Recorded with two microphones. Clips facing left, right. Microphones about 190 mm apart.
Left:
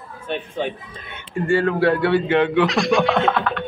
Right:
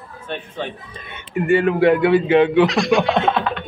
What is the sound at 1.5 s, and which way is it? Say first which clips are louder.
A man's voice: right 3 dB; 20° right (ahead or behind).